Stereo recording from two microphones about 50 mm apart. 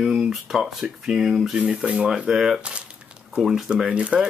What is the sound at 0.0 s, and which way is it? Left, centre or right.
Speech, centre.